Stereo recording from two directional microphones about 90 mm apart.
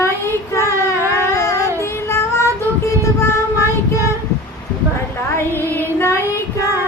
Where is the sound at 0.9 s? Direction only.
35° left (ahead or behind).